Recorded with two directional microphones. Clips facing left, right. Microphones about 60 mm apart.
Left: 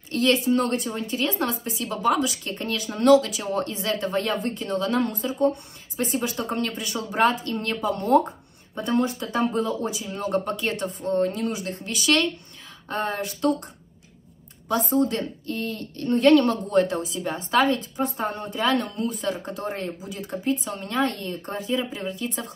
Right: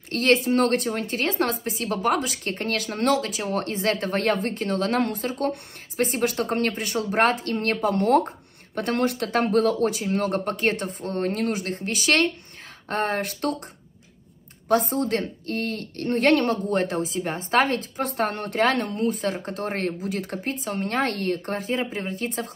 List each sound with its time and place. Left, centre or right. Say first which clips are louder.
0.1 s a woman's voice: right 1 dB; right
3.1 s a woman's voice: left 7 dB; right
11.1 s a woman's voice: even; right
14.7 s a woman's voice: right 1 dB; right
17.9 s speech: right 1 dB; right
18.7 s a woman's voice: right 1 dB; right
20.4 s a woman's voice: left 1 dB; right